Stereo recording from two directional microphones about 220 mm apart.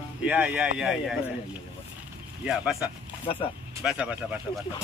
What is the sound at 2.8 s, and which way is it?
Speech, 25° left (ahead or behind).